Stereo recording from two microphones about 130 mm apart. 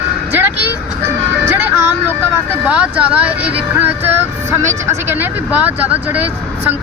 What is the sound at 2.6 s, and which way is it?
Speech, 10° right (ahead or behind).